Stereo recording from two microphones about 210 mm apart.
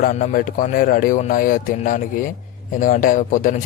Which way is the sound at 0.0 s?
40° left (ahead or behind).